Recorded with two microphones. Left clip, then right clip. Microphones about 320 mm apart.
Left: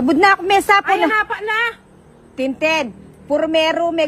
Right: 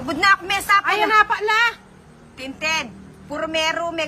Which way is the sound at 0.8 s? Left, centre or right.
Right.